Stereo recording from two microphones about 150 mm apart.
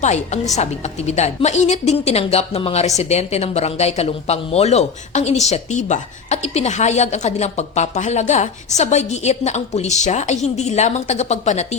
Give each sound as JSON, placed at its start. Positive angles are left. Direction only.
{"t": 0.0, "sound": "speech", "side_deg": 50}